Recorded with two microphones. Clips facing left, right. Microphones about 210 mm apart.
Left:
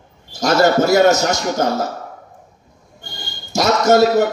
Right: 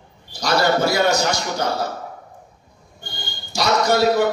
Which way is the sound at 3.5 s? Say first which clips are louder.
Left 5 dB; 45° left (ahead or behind).